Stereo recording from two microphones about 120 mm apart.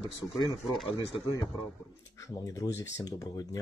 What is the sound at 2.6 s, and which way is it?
A man's voice, 35° left (ahead or behind).